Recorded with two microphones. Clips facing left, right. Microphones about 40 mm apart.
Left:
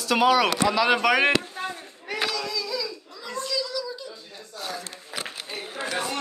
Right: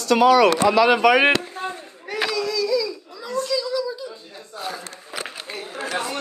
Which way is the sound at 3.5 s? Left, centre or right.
Centre.